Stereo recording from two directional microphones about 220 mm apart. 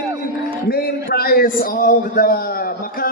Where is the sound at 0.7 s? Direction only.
45° left (ahead or behind).